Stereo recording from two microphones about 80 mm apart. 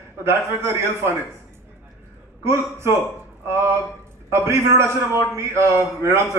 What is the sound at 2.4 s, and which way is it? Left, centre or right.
Speech, right.